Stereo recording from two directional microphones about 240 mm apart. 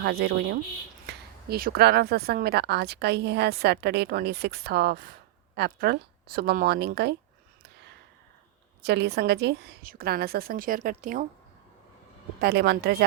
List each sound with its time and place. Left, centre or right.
0.0 s a woman's voice: right
8.8 s a woman's voice: right
12.4 s a woman's voice: right